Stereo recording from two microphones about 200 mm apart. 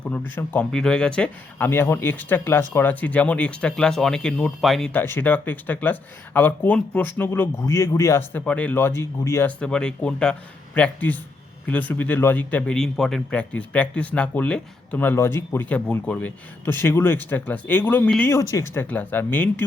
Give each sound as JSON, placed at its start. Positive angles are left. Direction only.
{"t": 0.0, "sound": "speech", "side_deg": 10}